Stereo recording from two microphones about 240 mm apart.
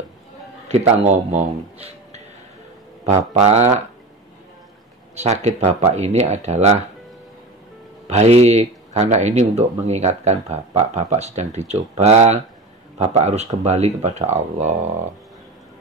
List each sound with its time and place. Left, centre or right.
1.0 s speech: right
5.1 s speech: right
8.1 s speech: right